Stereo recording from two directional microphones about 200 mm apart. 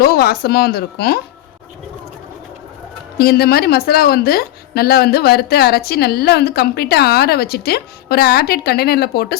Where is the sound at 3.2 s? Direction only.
50° left (ahead or behind).